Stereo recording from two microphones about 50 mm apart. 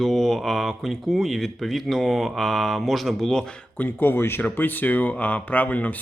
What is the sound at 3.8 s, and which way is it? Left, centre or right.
Speech, left.